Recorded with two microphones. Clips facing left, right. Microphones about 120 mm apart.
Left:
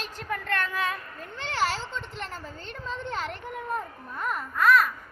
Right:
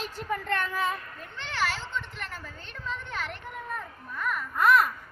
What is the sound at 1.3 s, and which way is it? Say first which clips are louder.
A child's voice: left 3 dB; 35° left (ahead or behind).